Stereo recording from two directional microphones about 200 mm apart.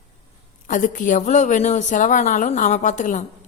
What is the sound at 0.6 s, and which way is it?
Speech, 40° left (ahead or behind).